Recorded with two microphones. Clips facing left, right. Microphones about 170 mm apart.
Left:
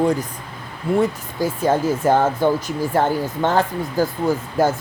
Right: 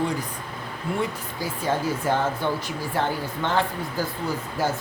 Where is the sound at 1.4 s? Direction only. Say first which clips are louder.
Left 8 dB; 45° left (ahead or behind).